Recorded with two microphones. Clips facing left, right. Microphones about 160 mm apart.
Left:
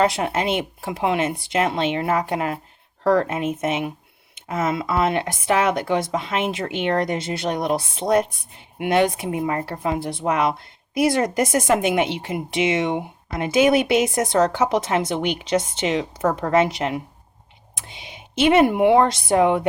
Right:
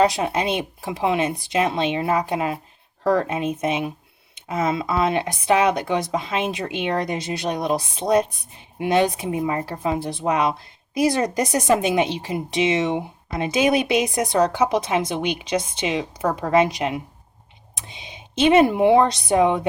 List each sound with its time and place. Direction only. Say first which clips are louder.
0.0 s speech: right 1 dB; 20° right (ahead or behind)
3.0 s speech: left 2 dB; 65° left (ahead or behind)
3.2 s speech: even; 20° right (ahead or behind)